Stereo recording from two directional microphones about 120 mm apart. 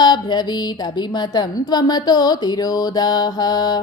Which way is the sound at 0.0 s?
35° left (ahead or behind).